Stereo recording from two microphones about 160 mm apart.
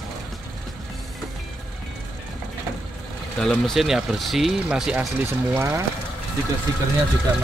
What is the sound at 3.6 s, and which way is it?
Speech, centre (ahead or behind).